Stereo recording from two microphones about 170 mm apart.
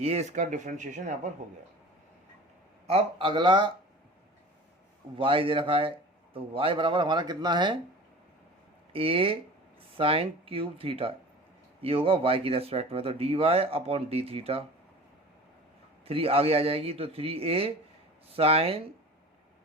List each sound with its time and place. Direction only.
0.0 s speech: 40° right (ahead or behind)
2.8 s speech: 35° right (ahead or behind)
5.1 s speech: 30° right (ahead or behind)
8.9 s speech: 35° right (ahead or behind)
16.0 s speech: 35° right (ahead or behind)